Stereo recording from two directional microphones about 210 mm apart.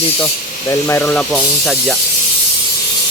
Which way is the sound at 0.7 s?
10° left (ahead or behind).